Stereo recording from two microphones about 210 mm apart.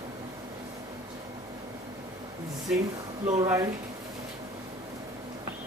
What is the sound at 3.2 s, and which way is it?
Speech, 15° right (ahead or behind).